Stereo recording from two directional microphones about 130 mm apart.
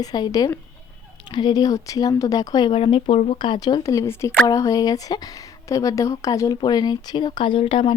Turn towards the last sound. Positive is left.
turn(degrees=40)  # may be behind; listen again after turning